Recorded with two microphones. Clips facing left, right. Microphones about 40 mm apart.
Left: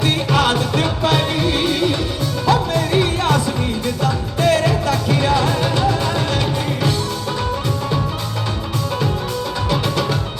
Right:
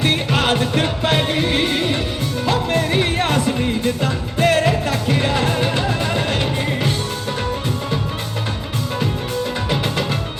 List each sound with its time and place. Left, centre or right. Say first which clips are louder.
0.0 s music: left 1 dB; right
9.6 s music: left 2 dB; right